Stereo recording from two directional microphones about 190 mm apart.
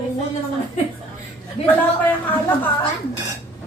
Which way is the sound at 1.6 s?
30° left (ahead or behind).